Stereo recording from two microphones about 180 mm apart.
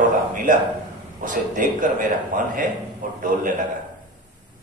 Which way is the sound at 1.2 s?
45° right (ahead or behind).